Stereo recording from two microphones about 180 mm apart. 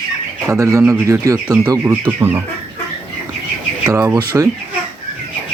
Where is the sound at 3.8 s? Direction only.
20° right (ahead or behind).